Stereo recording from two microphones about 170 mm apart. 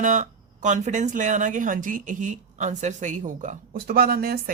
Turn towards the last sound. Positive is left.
turn(degrees=-65)  # may be behind; listen again after turning